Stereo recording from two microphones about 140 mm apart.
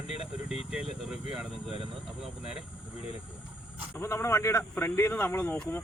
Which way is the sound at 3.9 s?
20° left (ahead or behind).